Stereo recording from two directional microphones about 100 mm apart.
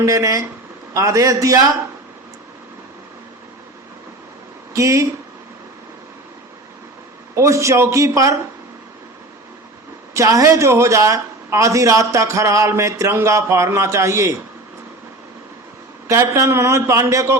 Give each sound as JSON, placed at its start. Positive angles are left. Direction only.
{"t": 0.0, "sound": "speech", "side_deg": -35}
{"t": 4.7, "sound": "speech", "side_deg": -35}
{"t": 7.3, "sound": "speech", "side_deg": -30}
{"t": 10.2, "sound": "speech", "side_deg": -30}
{"t": 16.0, "sound": "a man's voice", "side_deg": -30}